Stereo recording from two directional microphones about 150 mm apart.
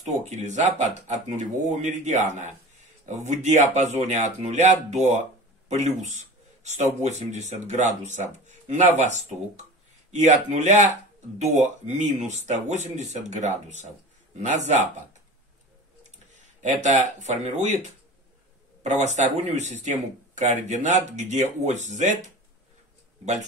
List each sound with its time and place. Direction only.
0.2 s speech: 50° right (ahead or behind)
16.3 s speech: 55° right (ahead or behind)